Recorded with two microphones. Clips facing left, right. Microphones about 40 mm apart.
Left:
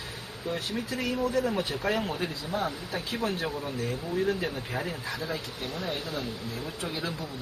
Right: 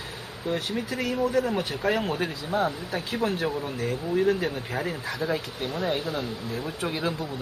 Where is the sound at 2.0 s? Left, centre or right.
Right.